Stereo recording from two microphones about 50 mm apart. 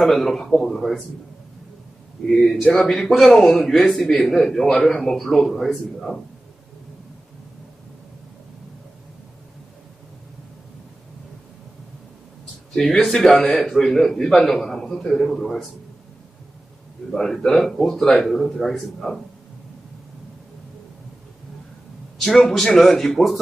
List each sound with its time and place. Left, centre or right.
0.0 s speech: centre
2.2 s a man's voice: centre
3.3 s speech: centre
3.5 s a man's voice: centre
12.7 s a man's voice: centre
17.1 s a man's voice: centre
22.2 s a man's voice: centre